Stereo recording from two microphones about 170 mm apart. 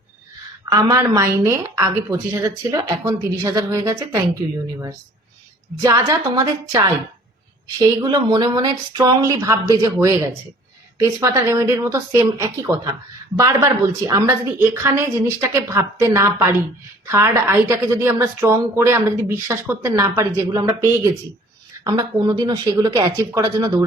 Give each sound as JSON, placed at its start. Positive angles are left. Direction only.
{"t": 0.6, "sound": "a woman's voice", "side_deg": -20}
{"t": 5.8, "sound": "a woman's voice", "side_deg": -20}